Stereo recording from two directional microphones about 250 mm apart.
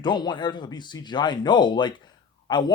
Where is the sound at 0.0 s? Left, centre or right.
Centre.